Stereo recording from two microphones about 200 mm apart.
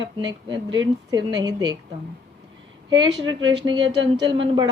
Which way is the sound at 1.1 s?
20° right (ahead or behind).